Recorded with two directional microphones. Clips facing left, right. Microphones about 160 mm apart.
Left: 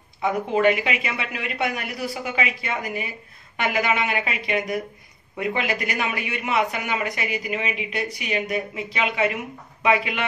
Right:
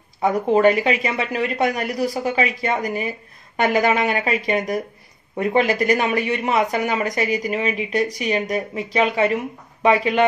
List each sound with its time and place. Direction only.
0.2 s a man's voice: 40° right (ahead or behind)